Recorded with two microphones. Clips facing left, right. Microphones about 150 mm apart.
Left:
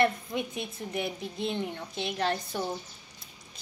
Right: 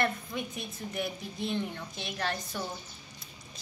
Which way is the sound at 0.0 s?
20° left (ahead or behind).